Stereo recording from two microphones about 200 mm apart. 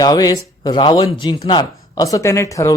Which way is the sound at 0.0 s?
20° left (ahead or behind).